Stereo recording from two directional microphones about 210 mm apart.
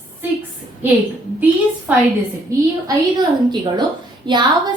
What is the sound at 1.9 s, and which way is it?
Speech, 10° right (ahead or behind).